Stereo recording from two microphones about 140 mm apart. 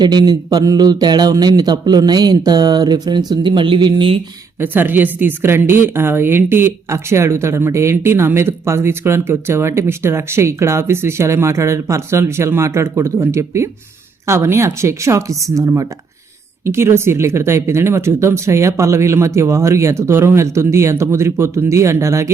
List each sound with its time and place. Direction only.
0.0 s speech: 30° right (ahead or behind)
4.6 s a woman's voice: 15° right (ahead or behind)